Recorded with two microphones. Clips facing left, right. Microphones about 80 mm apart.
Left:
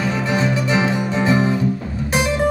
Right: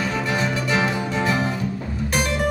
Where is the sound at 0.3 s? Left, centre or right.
Centre.